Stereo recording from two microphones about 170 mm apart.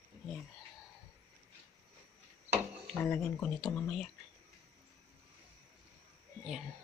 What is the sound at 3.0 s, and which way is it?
Speech, 10° left (ahead or behind).